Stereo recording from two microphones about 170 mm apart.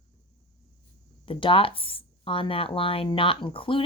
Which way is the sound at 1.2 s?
30° left (ahead or behind).